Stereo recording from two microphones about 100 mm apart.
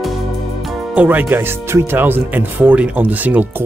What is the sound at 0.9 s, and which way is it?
Speech, 15° right (ahead or behind).